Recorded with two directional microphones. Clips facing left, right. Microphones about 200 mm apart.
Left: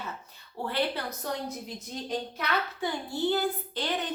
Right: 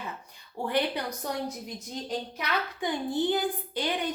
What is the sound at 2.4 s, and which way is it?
A woman's voice, 15° right (ahead or behind).